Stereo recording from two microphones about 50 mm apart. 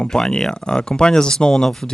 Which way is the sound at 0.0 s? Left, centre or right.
Centre.